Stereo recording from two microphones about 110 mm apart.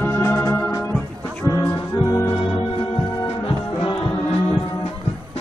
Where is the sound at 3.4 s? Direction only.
55° left (ahead or behind).